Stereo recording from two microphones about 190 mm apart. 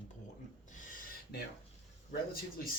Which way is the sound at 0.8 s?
45° left (ahead or behind).